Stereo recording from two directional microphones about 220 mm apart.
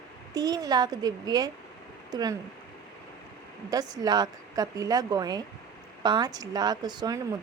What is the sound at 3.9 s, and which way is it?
A woman's voice, 20° right (ahead or behind).